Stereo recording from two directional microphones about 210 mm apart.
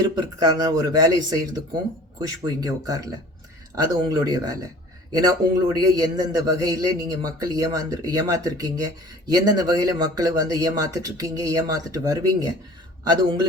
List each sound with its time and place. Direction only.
0.2 s a man's voice: 20° right (ahead or behind)